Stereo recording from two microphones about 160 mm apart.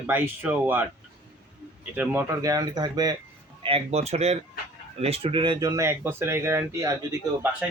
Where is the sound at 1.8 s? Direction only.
10° right (ahead or behind).